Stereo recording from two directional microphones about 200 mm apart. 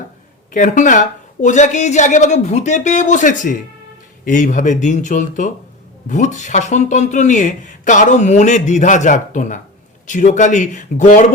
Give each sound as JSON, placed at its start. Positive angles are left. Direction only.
{"t": 0.5, "sound": "speech", "side_deg": 40}